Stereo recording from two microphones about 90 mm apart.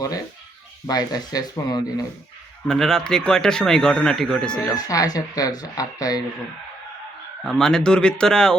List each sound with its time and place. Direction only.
0.9 s speech: 45° left (ahead or behind)
2.6 s speech: 5° left (ahead or behind)
4.9 s speech: 40° left (ahead or behind)
7.4 s speech: 5° left (ahead or behind)